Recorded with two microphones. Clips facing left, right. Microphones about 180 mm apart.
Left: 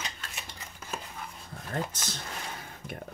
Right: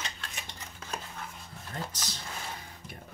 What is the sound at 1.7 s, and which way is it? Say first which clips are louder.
Speech: left 5 dB; 60° left (ahead or behind).